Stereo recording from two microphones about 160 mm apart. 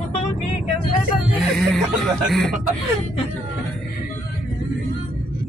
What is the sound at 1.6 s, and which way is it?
Cough, centre (ahead or behind).